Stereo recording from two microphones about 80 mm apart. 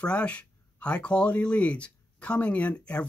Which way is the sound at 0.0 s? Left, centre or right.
Centre.